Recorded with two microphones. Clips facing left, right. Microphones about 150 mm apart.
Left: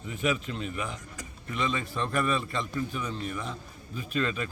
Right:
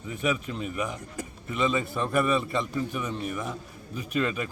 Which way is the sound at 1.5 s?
10° right (ahead or behind).